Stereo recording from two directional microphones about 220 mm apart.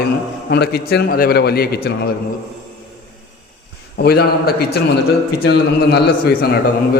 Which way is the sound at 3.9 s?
45° left (ahead or behind).